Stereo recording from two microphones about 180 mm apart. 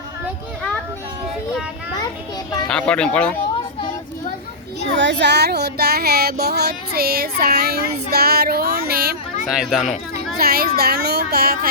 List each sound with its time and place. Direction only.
2.6 s speech: 5° left (ahead or behind)
4.9 s child singing: 80° right; by 9.1 s 60° right (ahead or behind)
9.5 s a child's voice: 5° right (ahead or behind)
10.3 s child singing: 60° right (ahead or behind)